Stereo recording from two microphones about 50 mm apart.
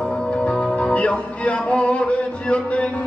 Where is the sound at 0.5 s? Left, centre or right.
Centre.